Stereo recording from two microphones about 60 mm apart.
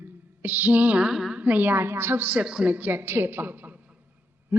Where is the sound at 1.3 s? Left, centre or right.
Right.